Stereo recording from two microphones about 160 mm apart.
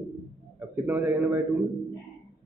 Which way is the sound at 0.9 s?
15° right (ahead or behind).